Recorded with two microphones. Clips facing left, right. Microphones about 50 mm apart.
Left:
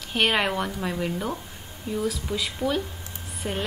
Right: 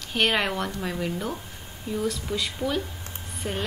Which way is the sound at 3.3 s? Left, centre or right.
Centre.